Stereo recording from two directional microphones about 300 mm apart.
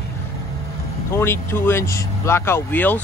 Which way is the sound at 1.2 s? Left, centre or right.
Centre.